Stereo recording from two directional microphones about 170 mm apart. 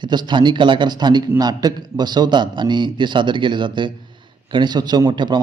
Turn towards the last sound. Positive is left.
turn(degrees=-25)  # may be behind; listen again after turning